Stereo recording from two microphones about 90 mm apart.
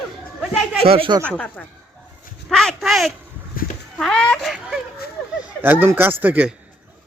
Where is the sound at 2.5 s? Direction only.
5° left (ahead or behind).